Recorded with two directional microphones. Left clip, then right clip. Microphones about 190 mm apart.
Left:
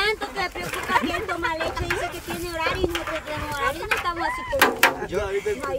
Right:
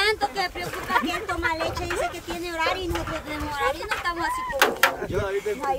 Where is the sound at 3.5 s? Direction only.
35° right (ahead or behind).